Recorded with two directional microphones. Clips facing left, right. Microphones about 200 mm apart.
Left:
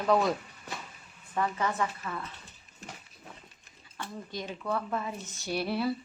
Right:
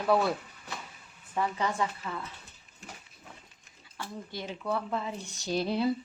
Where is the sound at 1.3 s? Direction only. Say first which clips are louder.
Even; 15° right (ahead or behind).